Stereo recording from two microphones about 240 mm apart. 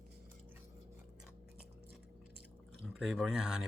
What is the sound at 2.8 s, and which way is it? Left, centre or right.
Speech, centre.